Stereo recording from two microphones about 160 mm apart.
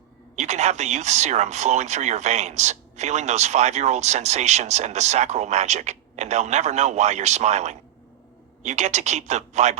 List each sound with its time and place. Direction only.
0.3 s speech: 45° right (ahead or behind)